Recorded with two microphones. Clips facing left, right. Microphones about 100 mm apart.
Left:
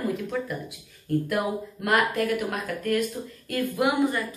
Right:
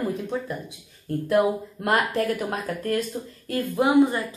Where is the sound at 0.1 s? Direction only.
30° right (ahead or behind).